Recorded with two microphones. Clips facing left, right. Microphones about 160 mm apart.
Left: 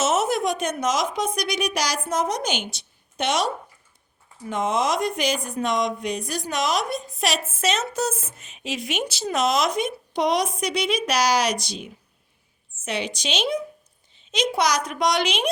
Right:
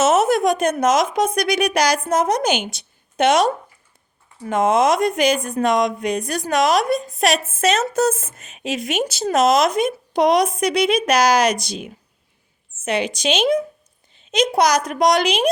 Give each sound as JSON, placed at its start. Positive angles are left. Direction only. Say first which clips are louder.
{"t": 0.0, "sound": "a woman's voice", "louder": "right 6 dB", "side_deg": -60}
{"t": 4.6, "sound": "speech", "louder": "right 7 dB", "side_deg": -70}
{"t": 12.8, "sound": "a woman's voice", "louder": "right 7 dB", "side_deg": -50}